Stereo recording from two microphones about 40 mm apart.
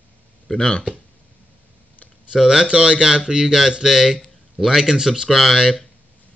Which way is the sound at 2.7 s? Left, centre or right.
Right.